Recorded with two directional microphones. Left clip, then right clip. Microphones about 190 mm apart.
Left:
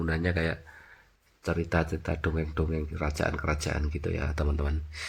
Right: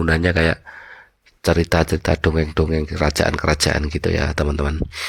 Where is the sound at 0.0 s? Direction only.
50° right (ahead or behind).